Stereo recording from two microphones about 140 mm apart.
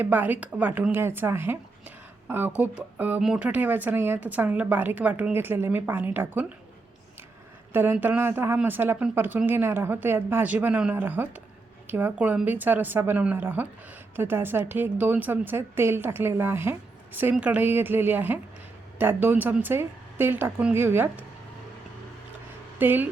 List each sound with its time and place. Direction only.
0.0 s a woman's voice: 15° right (ahead or behind)
7.7 s speech: 15° right (ahead or behind)
22.8 s speech: 15° right (ahead or behind)